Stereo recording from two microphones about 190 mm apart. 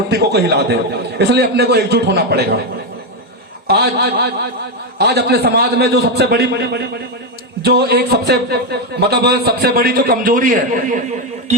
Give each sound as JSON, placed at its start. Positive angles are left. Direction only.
{"t": 0.1, "sound": "speech", "side_deg": -55}
{"t": 3.7, "sound": "speech", "side_deg": -60}